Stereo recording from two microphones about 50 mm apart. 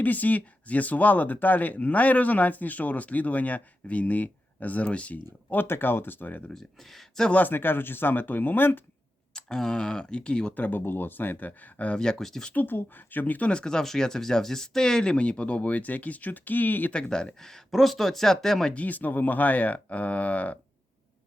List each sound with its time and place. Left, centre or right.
0.0 s speech: left
5.6 s speech: left
6.5 s speech: centre
7.4 s speech: left
9.3 s speech: centre
10.5 s speech: left
11.9 s speech: centre
12.5 s speech: left
13.5 s speech: centre; by 16.9 s left
16.9 s speech: centre
18.7 s speech: left